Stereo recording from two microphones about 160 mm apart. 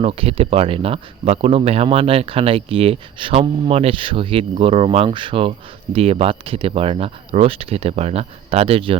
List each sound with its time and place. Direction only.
0.0 s speech: 35° right (ahead or behind)